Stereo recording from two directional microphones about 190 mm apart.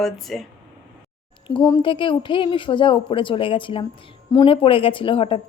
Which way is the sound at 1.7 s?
25° left (ahead or behind).